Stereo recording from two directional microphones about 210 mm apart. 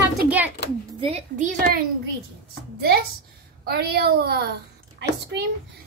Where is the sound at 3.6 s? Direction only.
50° right (ahead or behind).